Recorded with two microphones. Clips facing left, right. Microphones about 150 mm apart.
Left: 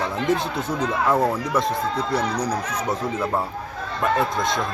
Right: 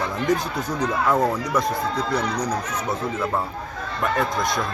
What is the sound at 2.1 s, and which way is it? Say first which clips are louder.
Speech: left 2 dB; 30° left (ahead or behind).